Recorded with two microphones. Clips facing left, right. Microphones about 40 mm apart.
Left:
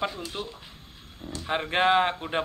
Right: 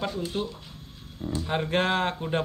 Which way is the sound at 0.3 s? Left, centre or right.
Centre.